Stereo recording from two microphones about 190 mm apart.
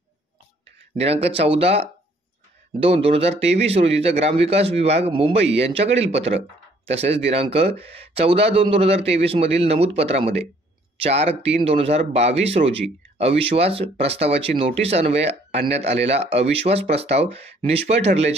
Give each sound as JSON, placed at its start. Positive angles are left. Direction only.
{"t": 0.9, "sound": "a man's voice", "side_deg": -30}